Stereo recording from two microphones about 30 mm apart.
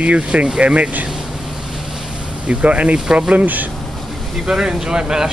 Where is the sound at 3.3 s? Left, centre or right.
Right.